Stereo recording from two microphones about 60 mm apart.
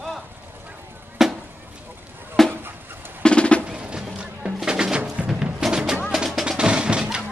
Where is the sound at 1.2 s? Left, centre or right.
Centre.